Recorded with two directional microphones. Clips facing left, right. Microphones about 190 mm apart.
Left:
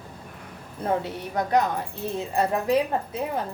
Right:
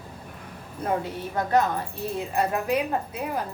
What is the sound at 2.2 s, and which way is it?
Speech, 30° left (ahead or behind).